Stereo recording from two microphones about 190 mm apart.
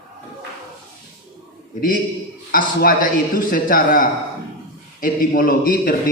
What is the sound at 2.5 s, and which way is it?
A man's voice, 50° left (ahead or behind).